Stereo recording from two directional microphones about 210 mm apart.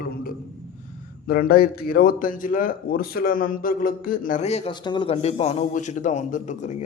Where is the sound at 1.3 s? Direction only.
45° left (ahead or behind).